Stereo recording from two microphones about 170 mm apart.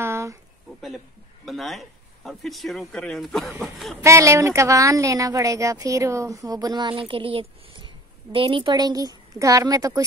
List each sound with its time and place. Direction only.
0.0 s a sound: 15° right (ahead or behind)
0.7 s a man's voice: centre (ahead or behind)
4.0 s speech: 15° right (ahead or behind)